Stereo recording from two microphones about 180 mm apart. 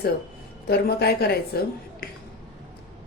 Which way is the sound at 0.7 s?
60° left (ahead or behind).